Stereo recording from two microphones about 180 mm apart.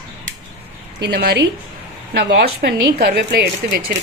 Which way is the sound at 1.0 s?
65° right (ahead or behind).